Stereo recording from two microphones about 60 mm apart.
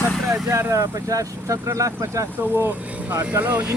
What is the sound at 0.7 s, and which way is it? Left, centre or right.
Speech, right.